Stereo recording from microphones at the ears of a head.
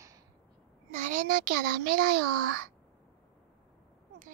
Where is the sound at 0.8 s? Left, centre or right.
Right.